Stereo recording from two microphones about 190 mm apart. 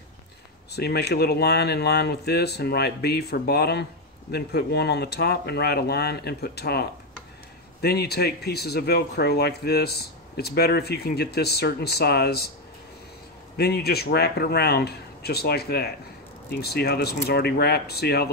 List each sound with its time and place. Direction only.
0.7 s speech: 60° left (ahead or behind)
13.6 s speech: 55° left (ahead or behind)